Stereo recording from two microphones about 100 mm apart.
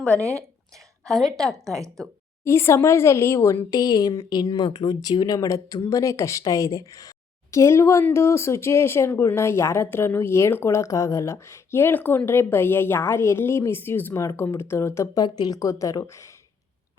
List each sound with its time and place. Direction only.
1.0 s a woman's voice: 5° left (ahead or behind)
2.4 s speech: 25° left (ahead or behind)
3.8 s speech: 40° left (ahead or behind)